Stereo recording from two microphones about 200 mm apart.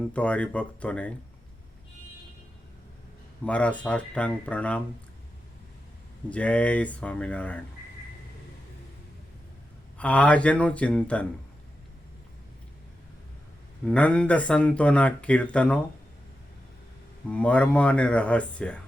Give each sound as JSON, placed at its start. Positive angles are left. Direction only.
{"t": 0.1, "sound": "speech", "side_deg": 5}
{"t": 3.4, "sound": "speech", "side_deg": 5}
{"t": 6.3, "sound": "speech", "side_deg": 5}
{"t": 10.0, "sound": "speech", "side_deg": 5}
{"t": 13.8, "sound": "speech", "side_deg": 5}
{"t": 17.2, "sound": "speech", "side_deg": 5}